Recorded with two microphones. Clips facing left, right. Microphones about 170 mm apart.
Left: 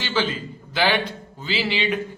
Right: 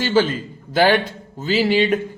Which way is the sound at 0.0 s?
45° right (ahead or behind).